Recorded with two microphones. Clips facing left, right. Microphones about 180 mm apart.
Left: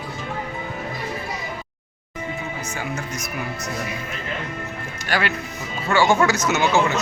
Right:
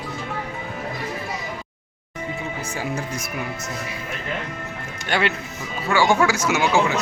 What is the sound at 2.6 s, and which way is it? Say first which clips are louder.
Speech: right 2 dB; 30° right (ahead or behind).